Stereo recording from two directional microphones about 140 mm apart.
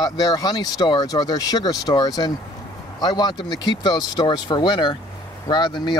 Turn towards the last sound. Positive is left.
turn(degrees=30)  # may be behind; listen again after turning